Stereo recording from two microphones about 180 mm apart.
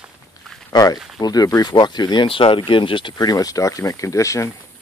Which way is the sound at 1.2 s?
20° left (ahead or behind).